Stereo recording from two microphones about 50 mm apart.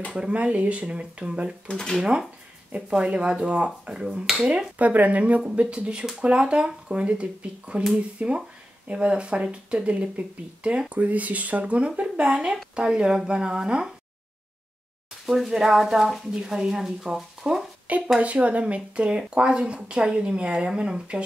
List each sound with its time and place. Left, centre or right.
0.1 s a woman's voice: centre
1.7 s speech: centre
2.9 s a woman's voice: centre
4.7 s a woman's voice: right
15.2 s speech: centre
17.8 s a woman's voice: right